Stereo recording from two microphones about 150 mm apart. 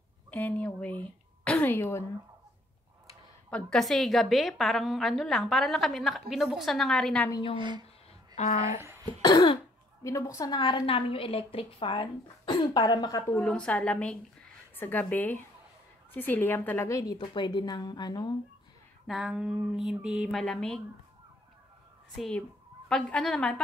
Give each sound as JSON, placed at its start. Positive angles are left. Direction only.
{"t": 0.3, "sound": "a woman's voice", "side_deg": 10}
{"t": 3.4, "sound": "a woman's voice", "side_deg": 5}
{"t": 7.2, "sound": "a woman's voice", "side_deg": 25}
{"t": 7.5, "sound": "speech", "side_deg": -30}
{"t": 8.5, "sound": "speech", "side_deg": -20}
{"t": 9.2, "sound": "cough", "side_deg": 30}
{"t": 10.0, "sound": "a woman's voice", "side_deg": 20}
{"t": 13.3, "sound": "a woman's voice", "side_deg": 10}
{"t": 19.0, "sound": "a woman's voice", "side_deg": -5}
{"t": 22.1, "sound": "a woman's voice", "side_deg": 0}